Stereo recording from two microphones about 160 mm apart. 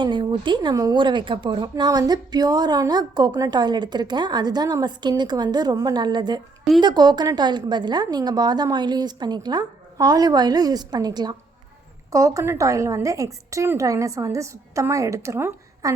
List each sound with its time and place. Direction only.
0.0 s speech: 30° right (ahead or behind)